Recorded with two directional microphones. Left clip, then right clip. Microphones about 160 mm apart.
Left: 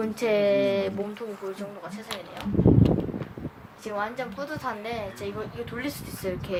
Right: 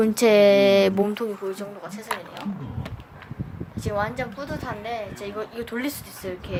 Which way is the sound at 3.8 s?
30° right (ahead or behind).